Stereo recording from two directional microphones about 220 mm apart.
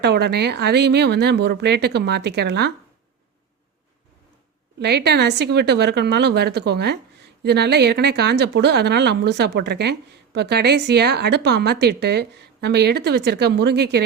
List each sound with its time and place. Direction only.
0.0 s a woman's voice: 50° right (ahead or behind)
4.8 s a woman's voice: 50° right (ahead or behind)